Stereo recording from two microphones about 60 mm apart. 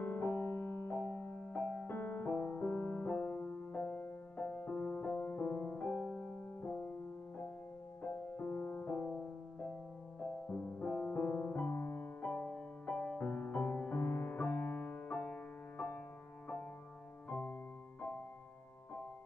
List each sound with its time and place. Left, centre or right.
0.0 s music: left
1.4 s music: left
1.9 s music: left
3.1 s music: left
5.1 s music: left
8.0 s music: left
10.2 s music: centre
17.3 s music: left